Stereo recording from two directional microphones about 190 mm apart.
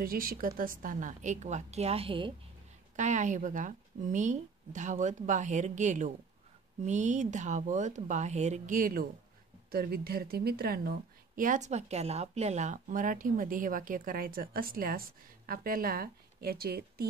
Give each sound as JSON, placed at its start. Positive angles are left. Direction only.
{"t": 0.0, "sound": "speech", "side_deg": -50}
{"t": 3.0, "sound": "a woman's voice", "side_deg": -40}